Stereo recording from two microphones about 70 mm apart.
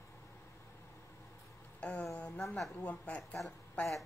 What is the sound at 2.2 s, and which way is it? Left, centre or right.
Speech, centre.